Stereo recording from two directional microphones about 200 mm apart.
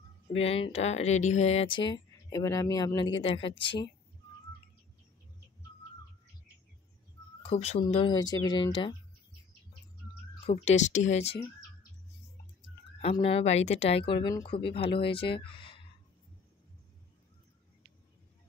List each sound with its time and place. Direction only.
0.3 s speech: 30° left (ahead or behind)
7.4 s speech: 30° left (ahead or behind)
10.4 s speech: 35° left (ahead or behind)
13.0 s speech: 30° left (ahead or behind)